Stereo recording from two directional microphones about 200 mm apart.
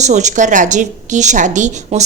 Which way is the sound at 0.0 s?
35° right (ahead or behind).